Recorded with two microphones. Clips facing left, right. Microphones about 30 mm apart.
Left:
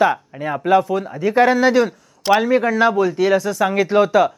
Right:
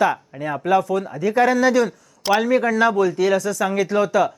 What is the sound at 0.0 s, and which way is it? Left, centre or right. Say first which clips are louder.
Speech: left 3 dB; centre.